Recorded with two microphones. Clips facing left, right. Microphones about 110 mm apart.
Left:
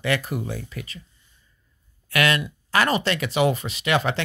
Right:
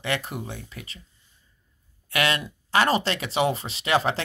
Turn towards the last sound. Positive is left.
turn(degrees=-30)  # may be behind; listen again after turning